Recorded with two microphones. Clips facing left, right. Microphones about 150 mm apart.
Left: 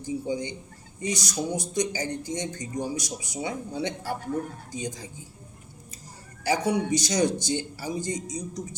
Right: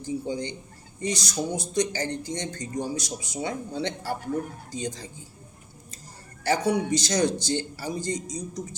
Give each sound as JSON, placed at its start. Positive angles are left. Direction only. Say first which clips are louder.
{"t": 0.0, "sound": "speech", "louder": "even", "side_deg": 15}
{"t": 6.4, "sound": "speech", "louder": "right 1 dB", "side_deg": 15}